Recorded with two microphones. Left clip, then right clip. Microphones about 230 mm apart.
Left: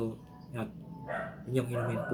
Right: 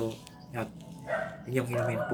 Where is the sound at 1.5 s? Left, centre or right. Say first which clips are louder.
Right 3 dB; centre.